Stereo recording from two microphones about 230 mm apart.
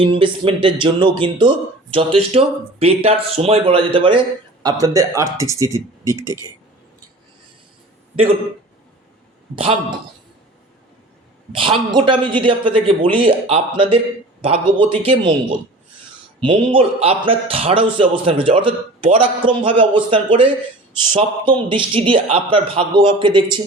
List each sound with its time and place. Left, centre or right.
0.0 s speech: right
11.5 s speech: right